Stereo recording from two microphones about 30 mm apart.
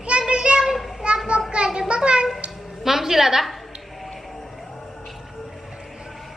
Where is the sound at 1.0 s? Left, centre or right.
Right.